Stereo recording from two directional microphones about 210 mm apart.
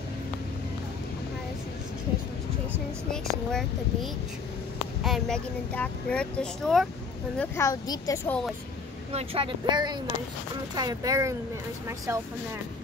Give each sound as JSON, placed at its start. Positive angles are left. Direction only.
{"t": 5.0, "sound": "speech", "side_deg": 0}
{"t": 7.3, "sound": "a woman's voice", "side_deg": 15}
{"t": 9.1, "sound": "speech", "side_deg": -25}